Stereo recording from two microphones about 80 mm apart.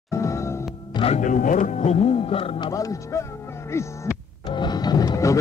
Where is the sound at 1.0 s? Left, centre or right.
Left.